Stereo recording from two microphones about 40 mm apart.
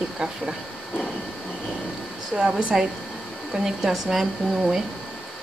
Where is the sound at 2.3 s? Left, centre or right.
Centre.